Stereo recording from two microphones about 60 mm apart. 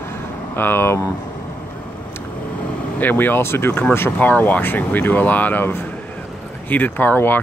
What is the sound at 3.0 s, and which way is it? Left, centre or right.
Speech, left.